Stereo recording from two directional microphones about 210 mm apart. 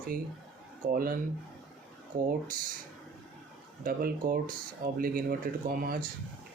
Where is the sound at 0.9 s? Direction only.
45° right (ahead or behind).